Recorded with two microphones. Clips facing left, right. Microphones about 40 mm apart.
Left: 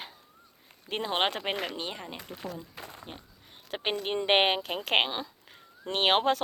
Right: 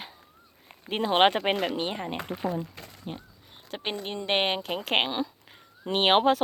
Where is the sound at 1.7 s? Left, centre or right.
Right.